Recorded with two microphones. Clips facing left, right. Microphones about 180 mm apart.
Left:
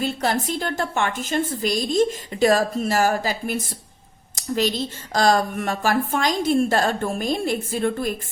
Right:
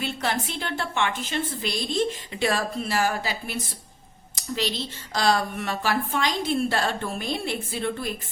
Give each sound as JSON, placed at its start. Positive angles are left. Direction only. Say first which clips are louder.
{"t": 0.0, "sound": "speech", "louder": "left 5 dB", "side_deg": 40}